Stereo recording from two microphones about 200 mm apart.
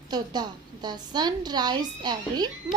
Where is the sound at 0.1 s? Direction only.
20° right (ahead or behind).